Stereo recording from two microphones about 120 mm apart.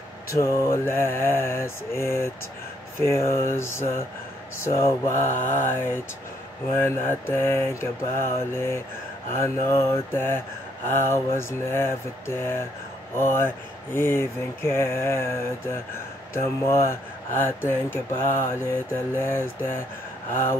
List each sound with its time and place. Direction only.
0.3 s mantra: 25° left (ahead or behind)
16.3 s mantra: 20° left (ahead or behind)